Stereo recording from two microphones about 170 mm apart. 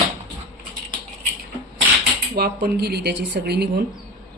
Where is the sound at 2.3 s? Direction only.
65° right (ahead or behind).